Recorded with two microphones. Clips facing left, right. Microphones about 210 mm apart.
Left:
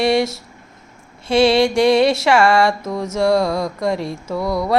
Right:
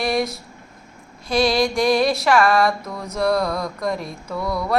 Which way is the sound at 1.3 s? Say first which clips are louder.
Left 5 dB; 25° left (ahead or behind).